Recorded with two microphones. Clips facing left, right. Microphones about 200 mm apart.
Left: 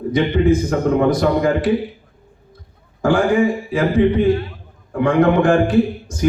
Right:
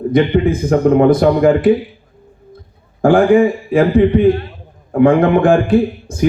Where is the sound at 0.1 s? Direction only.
55° right (ahead or behind).